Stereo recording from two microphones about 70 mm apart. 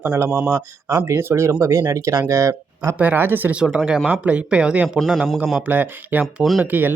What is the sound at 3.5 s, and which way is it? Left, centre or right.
Speech, centre.